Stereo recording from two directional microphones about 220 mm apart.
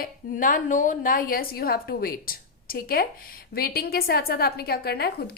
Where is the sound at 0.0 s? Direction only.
40° left (ahead or behind).